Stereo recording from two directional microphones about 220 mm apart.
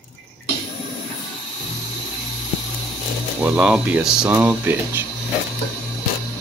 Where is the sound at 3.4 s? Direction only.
5° right (ahead or behind).